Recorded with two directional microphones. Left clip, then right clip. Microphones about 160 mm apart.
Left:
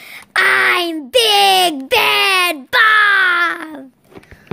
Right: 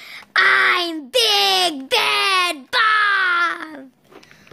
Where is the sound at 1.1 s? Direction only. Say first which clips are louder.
Left 5 dB; 20° left (ahead or behind).